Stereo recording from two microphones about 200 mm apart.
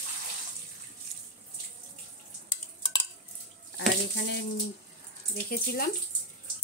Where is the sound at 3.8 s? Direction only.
65° left (ahead or behind).